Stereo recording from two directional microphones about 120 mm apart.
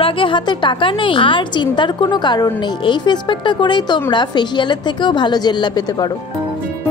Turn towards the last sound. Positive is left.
turn(degrees=35)  # may be behind; listen again after turning